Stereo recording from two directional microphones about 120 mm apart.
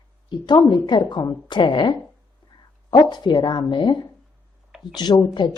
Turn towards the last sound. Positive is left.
turn(degrees=35)  # may be behind; listen again after turning